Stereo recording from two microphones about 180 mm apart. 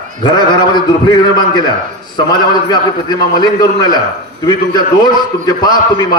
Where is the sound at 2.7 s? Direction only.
25° left (ahead or behind).